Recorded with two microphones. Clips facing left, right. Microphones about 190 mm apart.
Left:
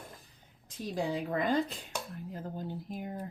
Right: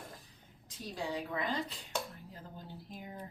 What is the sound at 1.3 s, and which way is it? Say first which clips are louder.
Speech: left 7 dB; 50° left (ahead or behind).